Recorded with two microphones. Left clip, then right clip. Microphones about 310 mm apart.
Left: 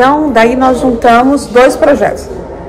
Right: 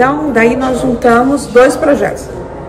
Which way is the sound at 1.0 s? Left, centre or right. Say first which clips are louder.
Left 3 dB; centre.